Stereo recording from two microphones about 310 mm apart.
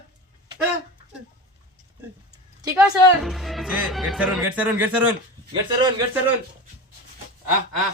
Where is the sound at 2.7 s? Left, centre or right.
Centre.